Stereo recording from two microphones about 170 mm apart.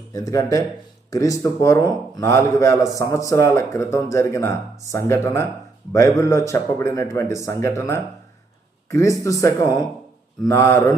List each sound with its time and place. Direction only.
0.1 s a man's voice: 20° left (ahead or behind)